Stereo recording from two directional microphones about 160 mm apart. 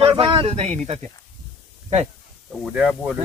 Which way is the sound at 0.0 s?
35° right (ahead or behind).